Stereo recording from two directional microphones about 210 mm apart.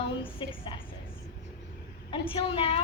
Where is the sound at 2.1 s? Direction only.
25° left (ahead or behind).